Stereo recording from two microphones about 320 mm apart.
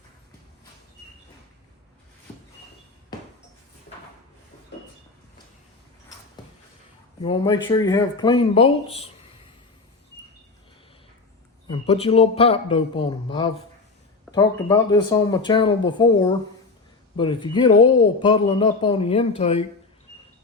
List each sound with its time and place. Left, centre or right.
7.2 s speech: centre
11.7 s speech: centre